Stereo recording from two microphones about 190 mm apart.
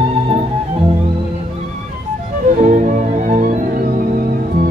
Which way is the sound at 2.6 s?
40° right (ahead or behind).